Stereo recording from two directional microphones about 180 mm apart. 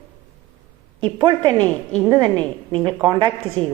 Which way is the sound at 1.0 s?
25° right (ahead or behind).